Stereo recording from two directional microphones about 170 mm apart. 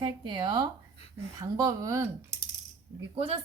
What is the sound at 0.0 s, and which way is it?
A woman's voice, 25° right (ahead or behind).